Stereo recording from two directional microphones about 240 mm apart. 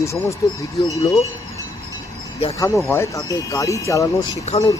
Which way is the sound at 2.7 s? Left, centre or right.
Centre.